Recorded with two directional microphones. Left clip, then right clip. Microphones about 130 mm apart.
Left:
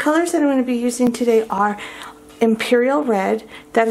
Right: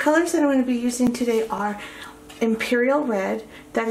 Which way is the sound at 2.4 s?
40° left (ahead or behind).